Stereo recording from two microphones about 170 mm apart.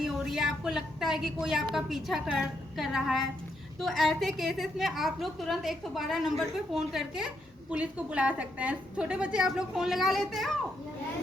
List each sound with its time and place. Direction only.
0.0 s a woman's voice: 5° right (ahead or behind)